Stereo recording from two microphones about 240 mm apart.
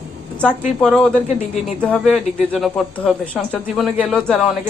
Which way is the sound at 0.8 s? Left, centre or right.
Centre.